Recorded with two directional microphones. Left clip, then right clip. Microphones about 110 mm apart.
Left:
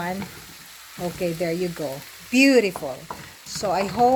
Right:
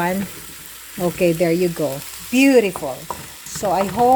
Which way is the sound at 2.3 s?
15° right (ahead or behind).